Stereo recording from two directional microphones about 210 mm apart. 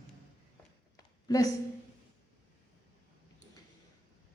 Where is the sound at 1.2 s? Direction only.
15° left (ahead or behind).